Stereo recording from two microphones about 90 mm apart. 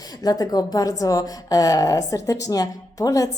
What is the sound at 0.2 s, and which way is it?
A woman's voice, 45° left (ahead or behind).